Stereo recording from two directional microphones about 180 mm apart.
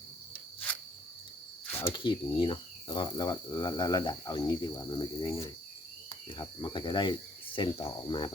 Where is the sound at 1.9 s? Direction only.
25° left (ahead or behind).